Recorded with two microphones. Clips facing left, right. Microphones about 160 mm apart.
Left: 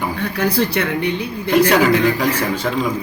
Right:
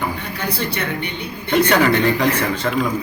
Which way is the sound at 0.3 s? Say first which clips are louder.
Left 9 dB; 90° left.